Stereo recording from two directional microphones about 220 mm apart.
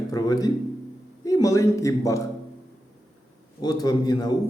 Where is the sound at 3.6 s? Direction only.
15° left (ahead or behind).